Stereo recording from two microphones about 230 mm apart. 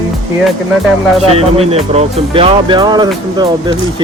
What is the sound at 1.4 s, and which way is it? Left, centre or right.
Speech, right.